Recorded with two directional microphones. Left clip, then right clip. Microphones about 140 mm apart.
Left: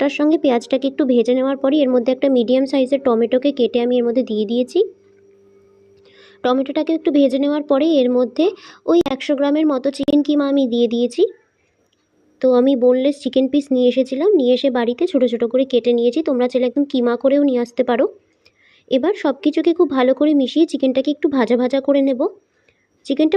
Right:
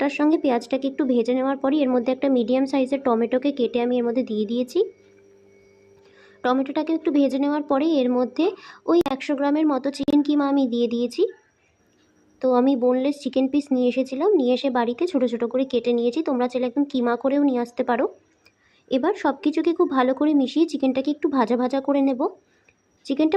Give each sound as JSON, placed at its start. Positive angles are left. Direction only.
{"t": 0.0, "sound": "speech", "side_deg": 20}
{"t": 6.1, "sound": "speech", "side_deg": 15}
{"t": 12.4, "sound": "speech", "side_deg": 20}